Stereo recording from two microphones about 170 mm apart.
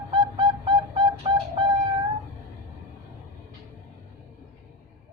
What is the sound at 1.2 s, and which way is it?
Flute, 30° right (ahead or behind).